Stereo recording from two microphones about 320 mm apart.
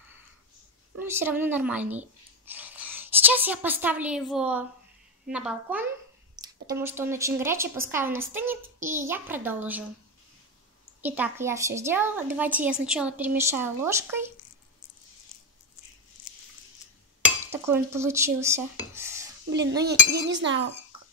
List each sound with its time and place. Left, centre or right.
0.9 s a woman's voice: centre
11.0 s a woman's voice: centre
17.5 s a woman's voice: centre
19.8 s speech: right